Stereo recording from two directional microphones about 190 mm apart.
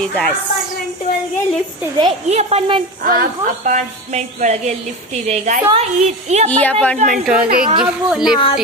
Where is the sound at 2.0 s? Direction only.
30° right (ahead or behind).